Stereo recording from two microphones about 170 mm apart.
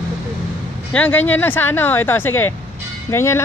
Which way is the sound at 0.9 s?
10° left (ahead or behind).